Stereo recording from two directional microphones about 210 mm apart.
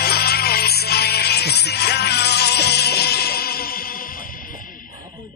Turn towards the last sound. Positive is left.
turn(degrees=45)  # may be behind; listen again after turning